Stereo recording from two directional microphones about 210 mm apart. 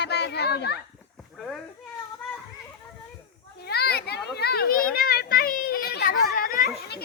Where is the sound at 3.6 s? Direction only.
50° left (ahead or behind).